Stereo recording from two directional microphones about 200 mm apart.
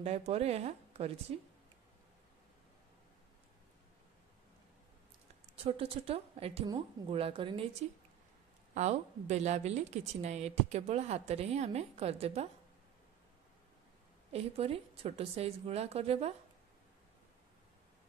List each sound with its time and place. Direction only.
0.0 s a woman's voice: 30° right (ahead or behind)
5.6 s a woman's voice: 30° right (ahead or behind)
8.7 s a woman's voice: 35° right (ahead or behind)
14.3 s a woman's voice: 30° right (ahead or behind)